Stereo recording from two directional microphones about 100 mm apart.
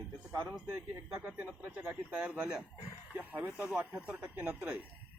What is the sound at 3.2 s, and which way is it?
A man's voice, 20° right (ahead or behind).